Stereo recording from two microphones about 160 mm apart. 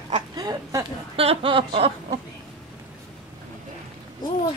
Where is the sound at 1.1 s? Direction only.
35° right (ahead or behind).